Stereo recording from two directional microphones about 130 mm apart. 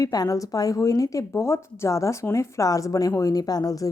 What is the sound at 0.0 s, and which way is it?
A woman's voice, 30° left (ahead or behind).